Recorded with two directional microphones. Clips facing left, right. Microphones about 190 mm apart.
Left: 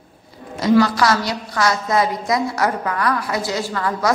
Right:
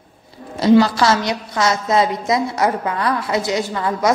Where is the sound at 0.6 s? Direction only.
30° right (ahead or behind).